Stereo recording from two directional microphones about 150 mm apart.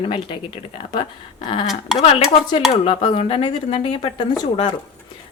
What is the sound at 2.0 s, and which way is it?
A woman's voice, 40° left (ahead or behind).